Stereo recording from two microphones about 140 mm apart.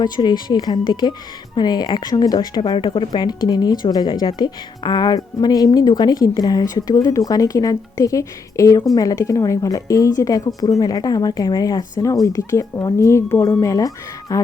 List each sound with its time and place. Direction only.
0.0 s a woman's voice: 30° left (ahead or behind)